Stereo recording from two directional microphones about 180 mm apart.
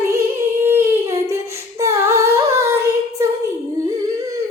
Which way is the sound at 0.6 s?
15° right (ahead or behind).